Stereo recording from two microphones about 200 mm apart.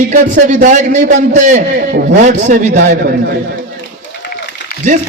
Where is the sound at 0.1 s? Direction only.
40° right (ahead or behind).